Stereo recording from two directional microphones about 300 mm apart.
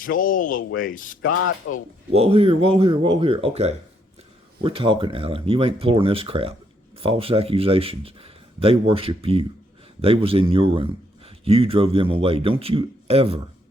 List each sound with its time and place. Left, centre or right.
0.0 s speech: left
1.3 s mechanisms: left
2.1 s speech: centre